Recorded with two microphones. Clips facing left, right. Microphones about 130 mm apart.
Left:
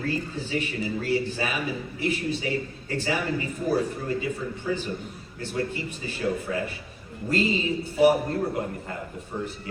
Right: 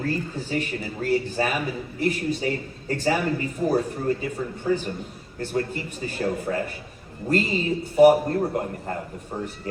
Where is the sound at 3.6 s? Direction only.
40° right (ahead or behind).